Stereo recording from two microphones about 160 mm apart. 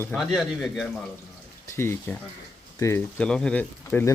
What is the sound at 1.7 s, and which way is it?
Speech, 15° left (ahead or behind).